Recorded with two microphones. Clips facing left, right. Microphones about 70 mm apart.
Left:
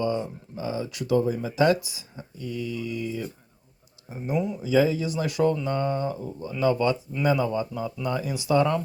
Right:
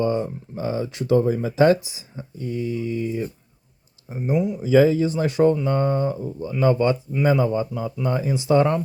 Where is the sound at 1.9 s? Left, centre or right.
Right.